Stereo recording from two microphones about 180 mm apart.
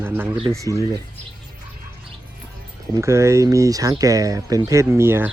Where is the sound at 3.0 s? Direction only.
15° right (ahead or behind).